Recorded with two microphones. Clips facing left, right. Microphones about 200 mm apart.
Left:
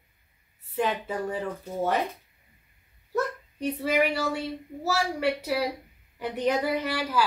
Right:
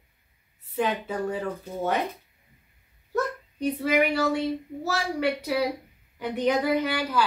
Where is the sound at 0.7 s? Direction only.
5° left (ahead or behind).